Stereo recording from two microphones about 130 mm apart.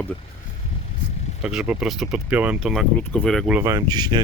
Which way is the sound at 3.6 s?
25° right (ahead or behind).